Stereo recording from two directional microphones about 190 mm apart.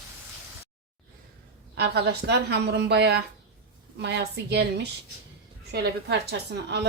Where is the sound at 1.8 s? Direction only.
60° right (ahead or behind).